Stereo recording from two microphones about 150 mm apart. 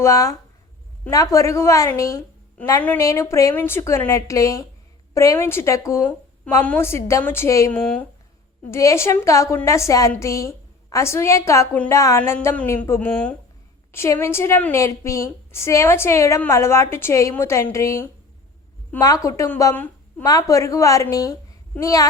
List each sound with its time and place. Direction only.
0.0 s a woman's voice: 20° left (ahead or behind)
7.7 s a woman's voice: 5° left (ahead or behind)
8.7 s a woman's voice: 20° left (ahead or behind)
20.2 s a woman's voice: 25° left (ahead or behind)